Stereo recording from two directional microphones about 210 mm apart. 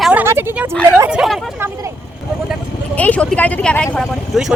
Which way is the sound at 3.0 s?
5° left (ahead or behind).